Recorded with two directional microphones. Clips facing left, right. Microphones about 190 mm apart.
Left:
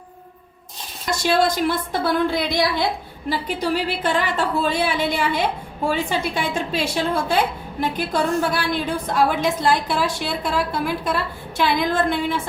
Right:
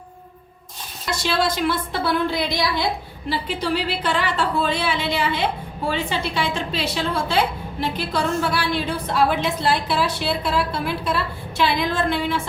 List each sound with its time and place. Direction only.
1.1 s a woman's voice: 45° left (ahead or behind)